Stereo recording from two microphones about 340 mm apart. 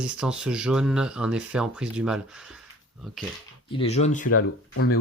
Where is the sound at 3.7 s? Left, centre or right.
Centre.